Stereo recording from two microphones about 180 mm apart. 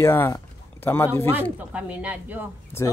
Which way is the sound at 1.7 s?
10° right (ahead or behind).